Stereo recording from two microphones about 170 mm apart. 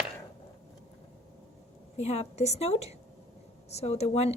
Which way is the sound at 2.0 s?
40° left (ahead or behind).